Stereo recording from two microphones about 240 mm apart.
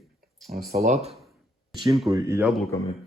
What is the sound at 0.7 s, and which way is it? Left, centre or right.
Speech, right.